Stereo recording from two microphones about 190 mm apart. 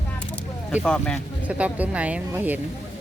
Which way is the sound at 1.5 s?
5° right (ahead or behind).